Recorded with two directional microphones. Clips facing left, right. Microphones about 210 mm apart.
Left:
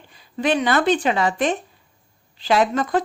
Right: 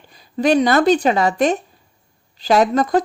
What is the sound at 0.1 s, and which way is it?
A woman's voice, 40° right (ahead or behind).